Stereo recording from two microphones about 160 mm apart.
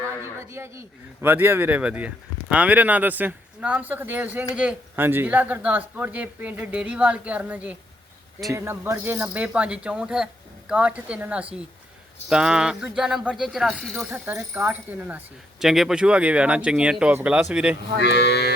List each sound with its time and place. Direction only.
0.3 s a man's voice: 15° right (ahead or behind); by 14.1 s centre (ahead or behind)
14.1 s a man's voice: 15° right (ahead or behind)
18.0 s a sound: 90° left